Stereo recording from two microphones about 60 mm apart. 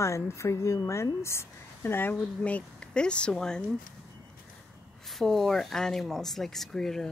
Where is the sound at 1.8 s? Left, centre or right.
Left.